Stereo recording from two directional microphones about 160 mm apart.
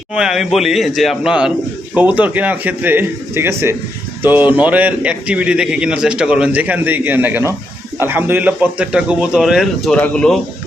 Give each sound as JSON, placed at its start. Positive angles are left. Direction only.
{"t": 0.1, "sound": "a man's voice", "side_deg": -5}